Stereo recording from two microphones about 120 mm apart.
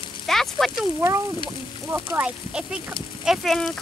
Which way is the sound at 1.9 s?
20° right (ahead or behind).